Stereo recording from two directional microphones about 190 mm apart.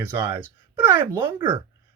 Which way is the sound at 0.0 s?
10° right (ahead or behind).